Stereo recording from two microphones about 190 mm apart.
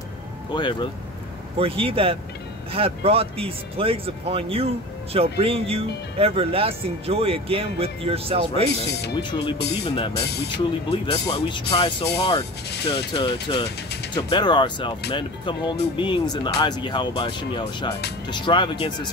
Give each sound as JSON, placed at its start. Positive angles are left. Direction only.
{"t": 0.6, "sound": "speech", "side_deg": 25}
{"t": 1.6, "sound": "speech", "side_deg": -30}
{"t": 9.3, "sound": "speech", "side_deg": 25}